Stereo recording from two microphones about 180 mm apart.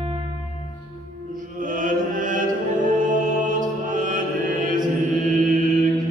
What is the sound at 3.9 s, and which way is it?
Music, 45° right (ahead or behind).